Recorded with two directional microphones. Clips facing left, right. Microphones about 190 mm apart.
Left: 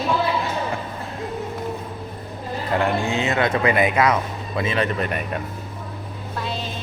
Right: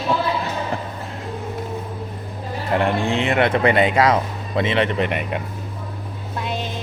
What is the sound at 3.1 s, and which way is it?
Speech, 30° right (ahead or behind).